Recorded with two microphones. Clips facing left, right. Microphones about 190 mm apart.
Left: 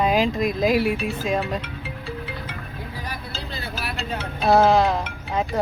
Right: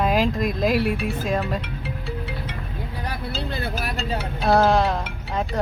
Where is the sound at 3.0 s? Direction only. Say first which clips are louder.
Right 4 dB; 60° right (ahead or behind).